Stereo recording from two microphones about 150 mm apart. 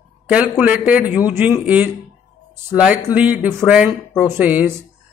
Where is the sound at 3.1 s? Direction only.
10° right (ahead or behind).